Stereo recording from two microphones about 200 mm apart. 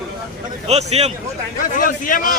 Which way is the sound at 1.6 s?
45° left (ahead or behind).